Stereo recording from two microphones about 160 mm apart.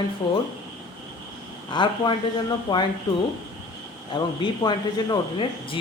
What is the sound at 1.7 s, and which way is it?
Speech, 30° left (ahead or behind).